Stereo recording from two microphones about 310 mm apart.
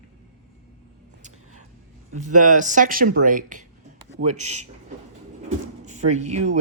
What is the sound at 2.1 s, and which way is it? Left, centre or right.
Speech, right.